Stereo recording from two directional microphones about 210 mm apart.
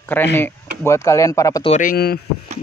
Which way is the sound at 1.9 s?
50° left (ahead or behind).